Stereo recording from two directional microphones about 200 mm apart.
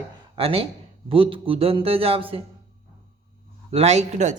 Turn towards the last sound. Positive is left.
turn(degrees=-35)  # may be behind; listen again after turning